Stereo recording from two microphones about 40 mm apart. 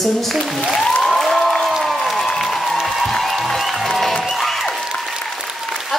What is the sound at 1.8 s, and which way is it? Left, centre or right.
Applause, centre.